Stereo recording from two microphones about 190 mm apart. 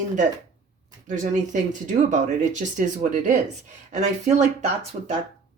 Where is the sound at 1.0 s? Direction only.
40° right (ahead or behind).